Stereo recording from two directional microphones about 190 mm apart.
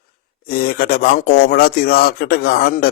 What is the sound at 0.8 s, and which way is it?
Speech, 50° left (ahead or behind).